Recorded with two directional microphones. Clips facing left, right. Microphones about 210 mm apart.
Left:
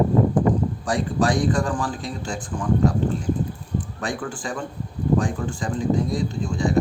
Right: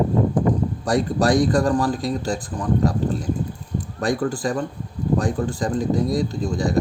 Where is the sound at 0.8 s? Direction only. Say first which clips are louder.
Right 4 dB; 40° right (ahead or behind).